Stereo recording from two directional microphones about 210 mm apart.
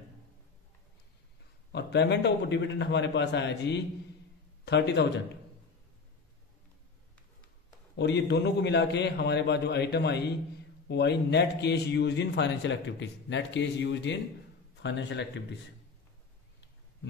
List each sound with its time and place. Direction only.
1.7 s a man's voice: 55° left (ahead or behind)
7.9 s a man's voice: 55° left (ahead or behind)